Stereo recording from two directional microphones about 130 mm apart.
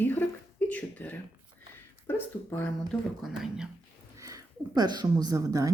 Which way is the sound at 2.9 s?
5° right (ahead or behind).